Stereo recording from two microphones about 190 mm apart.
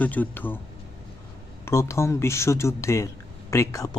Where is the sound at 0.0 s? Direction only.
10° left (ahead or behind).